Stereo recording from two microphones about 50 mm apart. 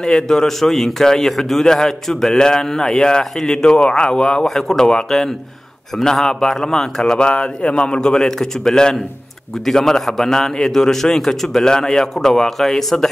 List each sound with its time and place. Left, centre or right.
0.0 s a man's voice: centre